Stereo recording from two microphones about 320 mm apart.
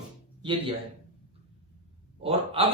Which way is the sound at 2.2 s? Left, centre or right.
Centre.